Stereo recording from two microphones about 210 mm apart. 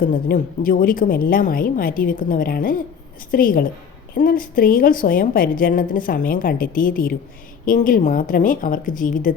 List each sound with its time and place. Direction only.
0.1 s a woman's voice: 40° left (ahead or behind)